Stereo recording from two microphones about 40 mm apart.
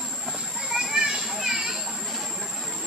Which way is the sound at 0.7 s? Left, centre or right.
Centre.